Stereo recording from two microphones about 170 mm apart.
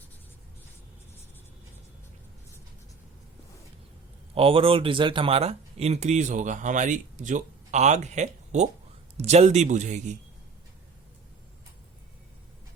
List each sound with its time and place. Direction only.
4.4 s a man's voice: 30° right (ahead or behind)